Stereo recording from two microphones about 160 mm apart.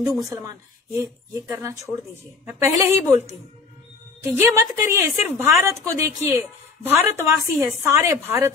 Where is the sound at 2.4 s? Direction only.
20° right (ahead or behind).